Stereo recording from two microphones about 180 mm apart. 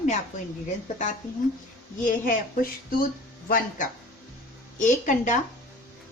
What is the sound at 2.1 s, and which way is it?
Speech, 50° left (ahead or behind).